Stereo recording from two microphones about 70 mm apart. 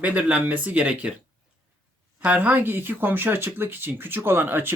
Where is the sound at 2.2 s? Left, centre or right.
Right.